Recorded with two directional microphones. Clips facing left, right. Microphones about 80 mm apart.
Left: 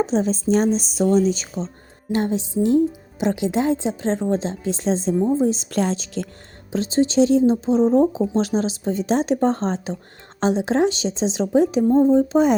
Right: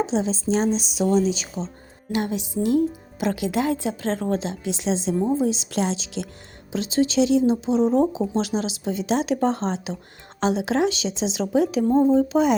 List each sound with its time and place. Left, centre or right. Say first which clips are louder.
0.0 s a woman's voice: left 3 dB; left
5.1 s a woman's voice: left 2 dB; centre
5.4 s a woman's voice: left 3 dB; left